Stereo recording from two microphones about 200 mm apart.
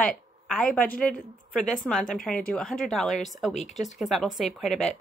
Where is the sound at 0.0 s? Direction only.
5° left (ahead or behind).